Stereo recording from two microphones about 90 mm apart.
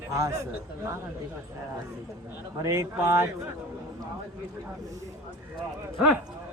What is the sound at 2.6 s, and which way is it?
Speech, 35° right (ahead or behind).